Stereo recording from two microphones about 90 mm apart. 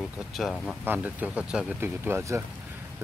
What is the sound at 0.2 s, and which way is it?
Speech, centre (ahead or behind).